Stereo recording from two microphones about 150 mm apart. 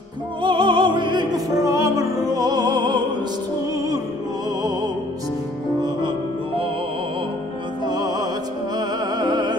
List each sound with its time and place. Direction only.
0.4 s music: 35° right (ahead or behind)
7.8 s music: 25° right (ahead or behind)